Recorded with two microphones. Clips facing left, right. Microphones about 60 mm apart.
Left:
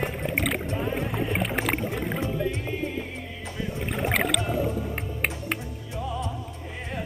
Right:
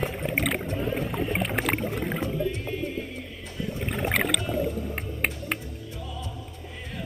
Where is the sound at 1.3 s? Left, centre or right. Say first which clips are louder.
Even; centre.